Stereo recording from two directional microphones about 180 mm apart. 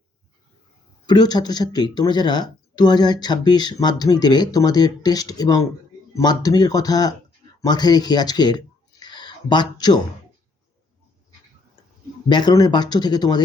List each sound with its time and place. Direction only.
1.0 s speech: 20° left (ahead or behind)
12.3 s speech: 25° left (ahead or behind)